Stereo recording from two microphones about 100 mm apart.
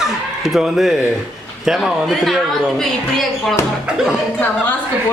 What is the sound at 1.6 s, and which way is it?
A woman's voice, 5° right (ahead or behind).